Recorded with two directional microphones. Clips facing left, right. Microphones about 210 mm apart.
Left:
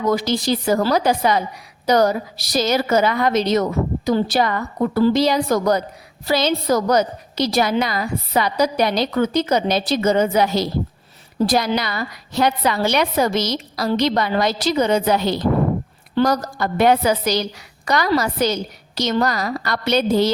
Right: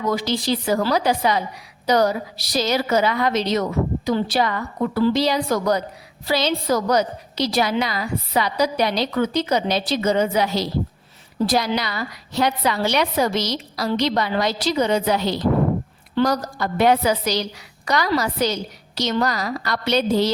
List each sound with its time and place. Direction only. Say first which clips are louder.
0.1 s a woman's voice: left 3 dB; 45° left (ahead or behind)